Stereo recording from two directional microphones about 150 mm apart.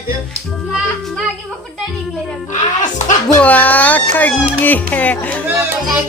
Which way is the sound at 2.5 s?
55° left (ahead or behind).